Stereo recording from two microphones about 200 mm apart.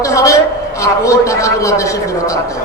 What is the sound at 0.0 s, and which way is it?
A man's voice, 15° left (ahead or behind).